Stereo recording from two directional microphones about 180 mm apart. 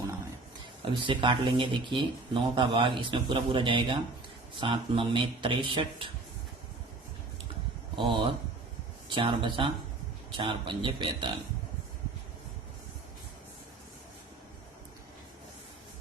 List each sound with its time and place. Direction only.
0.9 s speech: 25° right (ahead or behind)
7.9 s speech: 25° right (ahead or behind)